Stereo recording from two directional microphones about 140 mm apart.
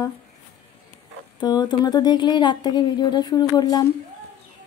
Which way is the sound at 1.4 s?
30° left (ahead or behind).